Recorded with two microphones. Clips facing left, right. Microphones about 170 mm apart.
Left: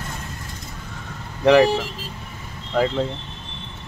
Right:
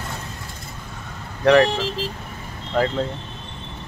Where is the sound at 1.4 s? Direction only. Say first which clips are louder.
Left 1 dB; 20° left (ahead or behind).